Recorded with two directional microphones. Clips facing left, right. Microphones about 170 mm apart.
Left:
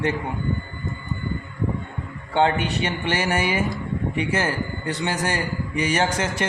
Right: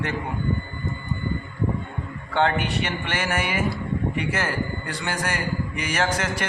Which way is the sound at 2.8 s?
30° left (ahead or behind).